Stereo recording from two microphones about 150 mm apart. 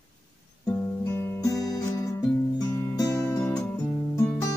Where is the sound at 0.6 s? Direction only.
15° left (ahead or behind).